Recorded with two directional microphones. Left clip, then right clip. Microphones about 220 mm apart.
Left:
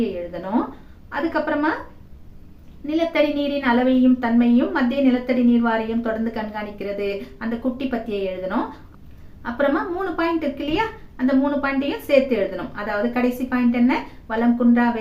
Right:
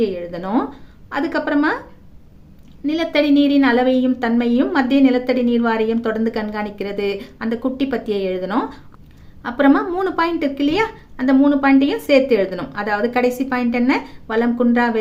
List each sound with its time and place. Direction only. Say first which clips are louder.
1.1 s a woman's voice: right 3 dB; 50° right (ahead or behind)
2.8 s a woman's voice: right 2 dB; 45° right (ahead or behind)